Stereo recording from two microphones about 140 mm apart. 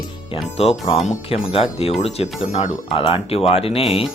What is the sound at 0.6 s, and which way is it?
Speech, 45° left (ahead or behind).